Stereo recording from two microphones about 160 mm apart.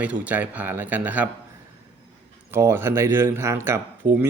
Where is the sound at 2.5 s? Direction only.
15° right (ahead or behind).